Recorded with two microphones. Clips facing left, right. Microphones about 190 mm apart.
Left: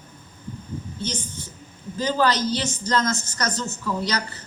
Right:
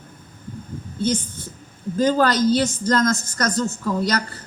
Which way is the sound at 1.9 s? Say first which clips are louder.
Right 4 dB; 50° right (ahead or behind).